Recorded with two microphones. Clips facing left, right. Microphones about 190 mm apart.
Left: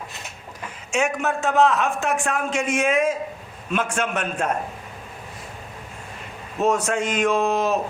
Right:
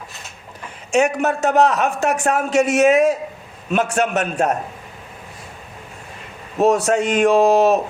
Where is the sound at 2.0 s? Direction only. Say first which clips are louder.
Right 4 dB; 70° right (ahead or behind).